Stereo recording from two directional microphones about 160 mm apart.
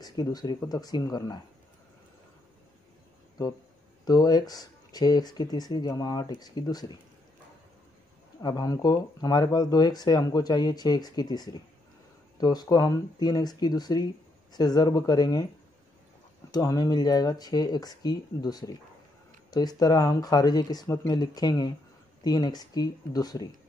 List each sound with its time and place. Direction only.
0.0 s speech: 25° left (ahead or behind)
3.4 s speech: 25° left (ahead or behind)
8.4 s speech: 25° left (ahead or behind)
16.5 s speech: 25° left (ahead or behind)